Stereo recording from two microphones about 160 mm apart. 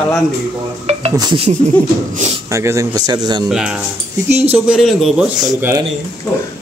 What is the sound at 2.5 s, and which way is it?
Speech, 20° right (ahead or behind).